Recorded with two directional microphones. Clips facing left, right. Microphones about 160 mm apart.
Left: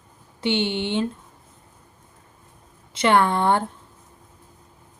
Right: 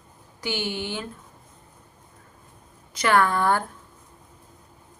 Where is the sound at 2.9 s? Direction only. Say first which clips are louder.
Left 2 dB; 25° left (ahead or behind).